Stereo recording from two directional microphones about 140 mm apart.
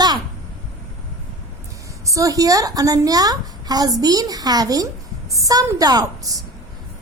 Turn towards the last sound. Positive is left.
turn(degrees=-25)  # may be behind; listen again after turning